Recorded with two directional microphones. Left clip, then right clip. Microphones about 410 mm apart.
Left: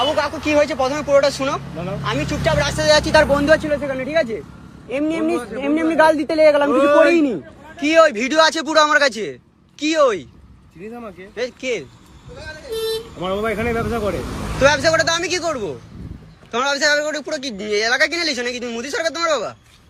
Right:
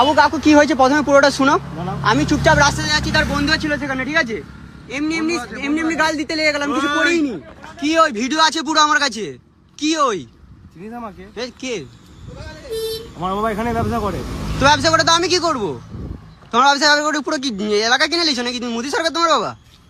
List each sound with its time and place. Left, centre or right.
0.0 s speech: centre
7.8 s speech: centre
11.3 s speech: centre
13.2 s speech: centre